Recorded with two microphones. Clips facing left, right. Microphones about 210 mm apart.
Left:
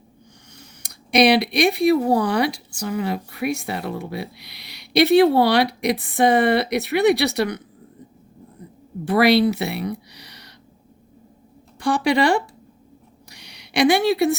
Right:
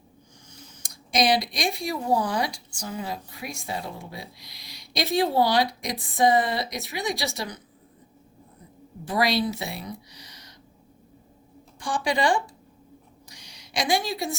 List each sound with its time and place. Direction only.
0.5 s speech: 65° left (ahead or behind)
9.0 s speech: 65° left (ahead or behind)
11.8 s speech: 65° left (ahead or behind)
13.3 s a sound: 65° left (ahead or behind)